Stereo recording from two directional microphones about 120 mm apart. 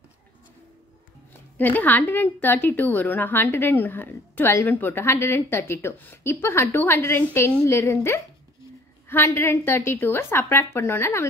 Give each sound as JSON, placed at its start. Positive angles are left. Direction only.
{"t": 1.6, "sound": "a woman's voice", "side_deg": 15}